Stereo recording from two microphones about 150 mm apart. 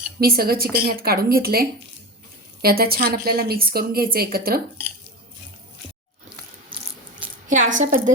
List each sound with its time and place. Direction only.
0.2 s a woman's voice: 90° right
7.4 s a woman's voice: 55° right (ahead or behind)